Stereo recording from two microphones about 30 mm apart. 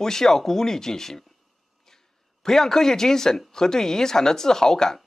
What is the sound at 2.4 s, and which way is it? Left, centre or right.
Speech, centre.